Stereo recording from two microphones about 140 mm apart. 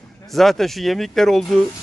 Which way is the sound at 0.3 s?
Centre (ahead or behind).